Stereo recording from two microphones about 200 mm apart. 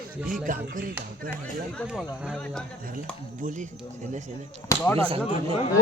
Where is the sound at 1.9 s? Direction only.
5° right (ahead or behind).